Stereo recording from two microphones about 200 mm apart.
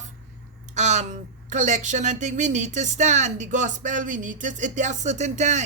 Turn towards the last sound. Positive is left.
turn(degrees=-35)  # may be behind; listen again after turning